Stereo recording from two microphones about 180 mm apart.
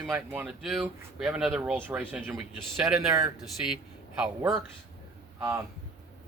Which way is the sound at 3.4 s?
5° right (ahead or behind).